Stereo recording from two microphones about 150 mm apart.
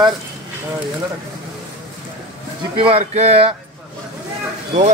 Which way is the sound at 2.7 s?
40° right (ahead or behind).